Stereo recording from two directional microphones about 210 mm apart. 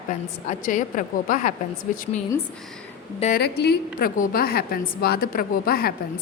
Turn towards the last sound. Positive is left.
turn(degrees=45)  # may be behind; listen again after turning